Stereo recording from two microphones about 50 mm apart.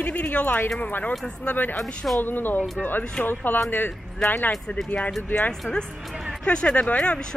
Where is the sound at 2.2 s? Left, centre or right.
Left.